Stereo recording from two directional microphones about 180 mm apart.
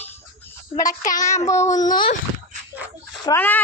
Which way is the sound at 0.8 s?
20° left (ahead or behind).